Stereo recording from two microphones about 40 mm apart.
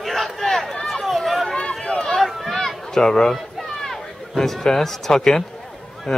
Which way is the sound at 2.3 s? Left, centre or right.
Centre.